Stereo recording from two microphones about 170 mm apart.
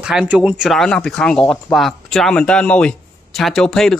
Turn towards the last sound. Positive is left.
turn(degrees=5)  # may be behind; listen again after turning